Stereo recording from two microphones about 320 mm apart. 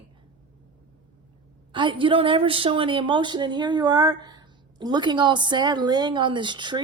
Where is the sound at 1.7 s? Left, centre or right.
Centre.